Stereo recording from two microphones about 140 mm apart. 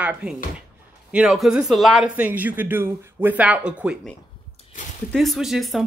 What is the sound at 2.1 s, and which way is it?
Speech, 10° right (ahead or behind).